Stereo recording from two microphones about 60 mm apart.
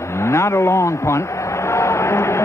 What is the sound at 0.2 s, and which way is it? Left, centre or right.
A man's voice, left.